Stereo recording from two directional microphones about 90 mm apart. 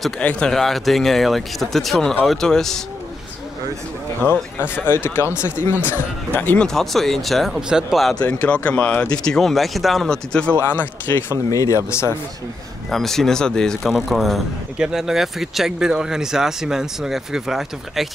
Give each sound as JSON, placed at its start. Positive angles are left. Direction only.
{"t": 0.2, "sound": "speech", "side_deg": 10}
{"t": 4.6, "sound": "speech", "side_deg": 25}
{"t": 6.7, "sound": "speech", "side_deg": 0}
{"t": 8.2, "sound": "speech", "side_deg": 15}
{"t": 10.7, "sound": "speech", "side_deg": 25}
{"t": 11.5, "sound": "speech", "side_deg": 35}
{"t": 12.9, "sound": "speech", "side_deg": 5}
{"t": 13.9, "sound": "speech", "side_deg": -5}